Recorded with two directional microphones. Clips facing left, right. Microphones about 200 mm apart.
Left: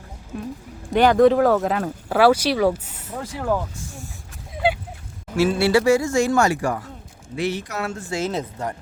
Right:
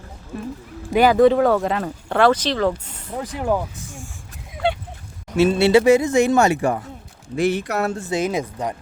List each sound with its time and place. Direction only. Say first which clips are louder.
0.3 s speech: right 1 dB; centre (ahead or behind)
3.1 s speech: right 2 dB; 15° right (ahead or behind)
4.6 s a sound: even; 5° left (ahead or behind)
5.4 s speech: right 3 dB; 20° right (ahead or behind)
7.3 s speech: right 5 dB; 50° right (ahead or behind)
8.1 s speech: right 1 dB; 15° right (ahead or behind)